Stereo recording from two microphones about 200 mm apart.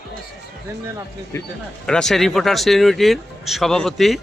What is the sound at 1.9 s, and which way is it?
Speech, 5° left (ahead or behind).